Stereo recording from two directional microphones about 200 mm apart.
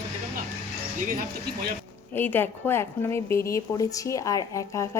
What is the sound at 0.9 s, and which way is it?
Speech, 45° right (ahead or behind).